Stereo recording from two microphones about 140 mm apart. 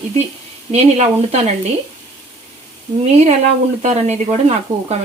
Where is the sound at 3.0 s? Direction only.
50° right (ahead or behind).